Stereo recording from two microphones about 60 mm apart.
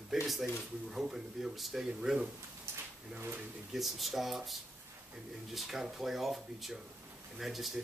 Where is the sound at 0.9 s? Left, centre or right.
Centre.